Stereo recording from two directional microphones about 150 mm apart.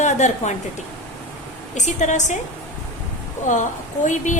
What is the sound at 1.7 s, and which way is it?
Speech, 50° left (ahead or behind).